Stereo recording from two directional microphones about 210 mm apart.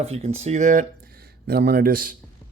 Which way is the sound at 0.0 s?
30° right (ahead or behind).